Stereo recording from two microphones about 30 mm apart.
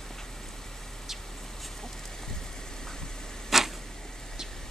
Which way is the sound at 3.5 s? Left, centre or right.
Centre.